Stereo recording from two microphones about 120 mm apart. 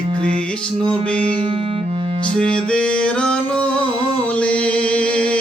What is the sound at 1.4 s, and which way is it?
Music, 45° right (ahead or behind).